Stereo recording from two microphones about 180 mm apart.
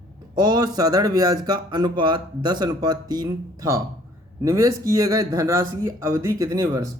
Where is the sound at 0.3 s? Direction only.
20° right (ahead or behind).